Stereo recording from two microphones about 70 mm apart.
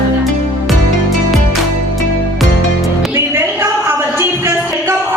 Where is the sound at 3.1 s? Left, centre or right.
Right.